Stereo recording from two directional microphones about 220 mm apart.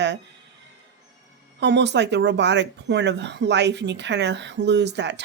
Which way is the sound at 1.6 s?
50° right (ahead or behind).